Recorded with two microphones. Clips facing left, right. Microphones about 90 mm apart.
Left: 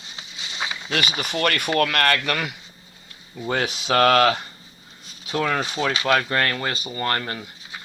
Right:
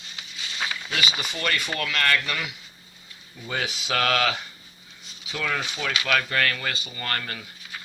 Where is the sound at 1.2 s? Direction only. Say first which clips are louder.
Left 5 dB; 55° left (ahead or behind).